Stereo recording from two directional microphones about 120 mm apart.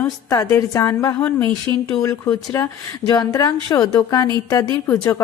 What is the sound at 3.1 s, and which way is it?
Speech, 35° left (ahead or behind).